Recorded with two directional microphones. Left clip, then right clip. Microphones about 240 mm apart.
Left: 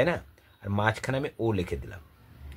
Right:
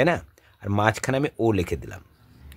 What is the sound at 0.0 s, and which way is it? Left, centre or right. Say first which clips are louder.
Speech: right 5 dB; right.